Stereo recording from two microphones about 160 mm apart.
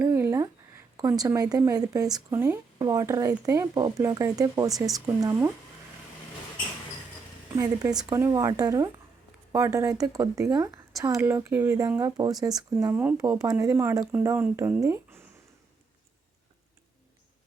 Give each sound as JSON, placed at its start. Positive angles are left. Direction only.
{"t": 0.0, "sound": "a sound", "side_deg": -15}
{"t": 0.9, "sound": "speech", "side_deg": -25}
{"t": 7.5, "sound": "speech", "side_deg": -25}
{"t": 12.9, "sound": "speech", "side_deg": -10}